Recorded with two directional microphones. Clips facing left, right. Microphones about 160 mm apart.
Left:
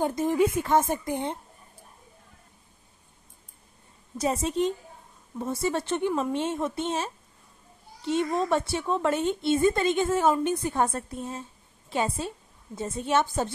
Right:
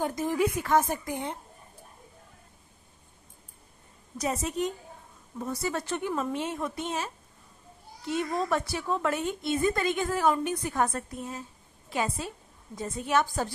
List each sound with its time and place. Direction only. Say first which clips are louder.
0.0 s speech: left 3 dB; 25° left (ahead or behind)
4.2 s a woman's voice: left 4 dB; 30° left (ahead or behind)